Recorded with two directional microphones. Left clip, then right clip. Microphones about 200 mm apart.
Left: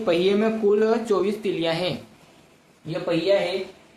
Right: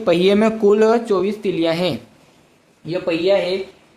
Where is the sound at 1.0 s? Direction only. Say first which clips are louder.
Right 4 dB; 25° right (ahead or behind).